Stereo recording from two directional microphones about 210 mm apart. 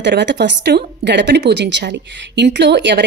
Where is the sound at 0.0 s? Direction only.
55° right (ahead or behind).